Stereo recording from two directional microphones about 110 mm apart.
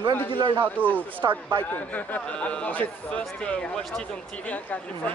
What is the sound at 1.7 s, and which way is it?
Speech, 15° left (ahead or behind).